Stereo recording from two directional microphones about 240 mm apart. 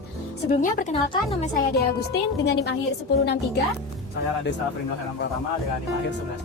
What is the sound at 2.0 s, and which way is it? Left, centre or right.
Speech, left.